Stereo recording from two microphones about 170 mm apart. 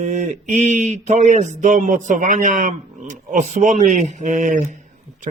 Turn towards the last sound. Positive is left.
turn(degrees=-45)  # may be behind; listen again after turning